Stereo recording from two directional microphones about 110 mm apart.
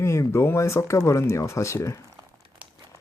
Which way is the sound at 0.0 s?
25° left (ahead or behind).